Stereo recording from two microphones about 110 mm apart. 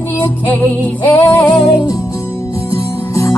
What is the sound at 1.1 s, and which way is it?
Music, 20° left (ahead or behind).